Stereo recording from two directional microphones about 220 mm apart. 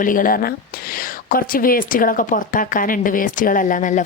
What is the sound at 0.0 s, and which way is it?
A woman's voice, 40° left (ahead or behind).